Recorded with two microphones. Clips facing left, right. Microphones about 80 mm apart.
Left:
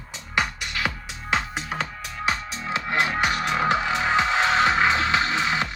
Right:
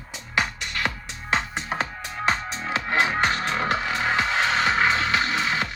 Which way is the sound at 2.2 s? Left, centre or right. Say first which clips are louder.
Right 2 dB; right.